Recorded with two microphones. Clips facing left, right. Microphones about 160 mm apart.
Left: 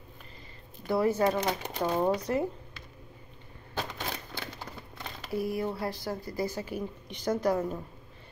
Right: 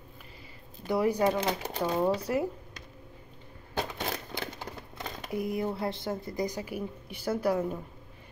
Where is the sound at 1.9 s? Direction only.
15° left (ahead or behind).